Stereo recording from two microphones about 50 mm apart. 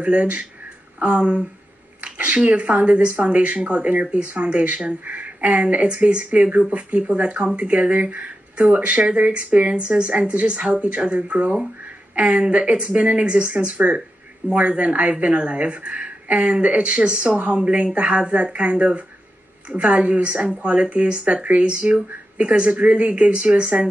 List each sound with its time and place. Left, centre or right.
0.0 s speech: right